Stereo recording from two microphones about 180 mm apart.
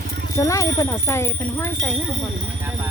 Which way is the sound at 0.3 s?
15° left (ahead or behind).